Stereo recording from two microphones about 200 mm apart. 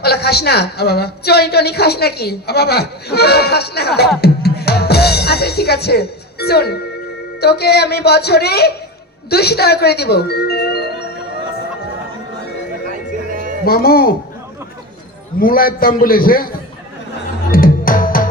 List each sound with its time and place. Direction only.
0.0 s a woman's voice: 50° left (ahead or behind)
4.2 s music: 55° left (ahead or behind)
7.4 s a woman's voice: 55° left (ahead or behind)
13.7 s a woman's voice: 50° left (ahead or behind)
15.4 s a woman's voice: 45° left (ahead or behind)
17.5 s music: 45° left (ahead or behind)